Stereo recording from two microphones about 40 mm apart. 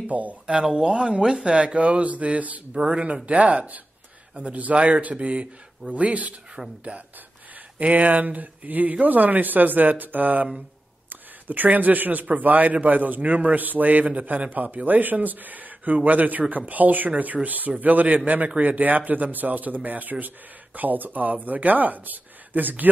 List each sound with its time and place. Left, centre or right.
0.1 s speech: right
0.7 s a man's voice: right